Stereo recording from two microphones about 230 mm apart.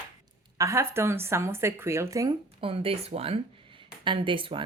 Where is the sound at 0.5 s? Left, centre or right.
Centre.